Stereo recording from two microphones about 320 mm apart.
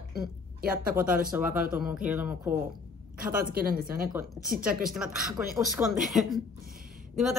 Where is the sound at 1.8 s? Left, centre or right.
Centre.